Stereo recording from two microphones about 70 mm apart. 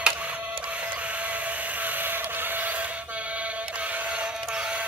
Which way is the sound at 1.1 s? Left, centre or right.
Centre.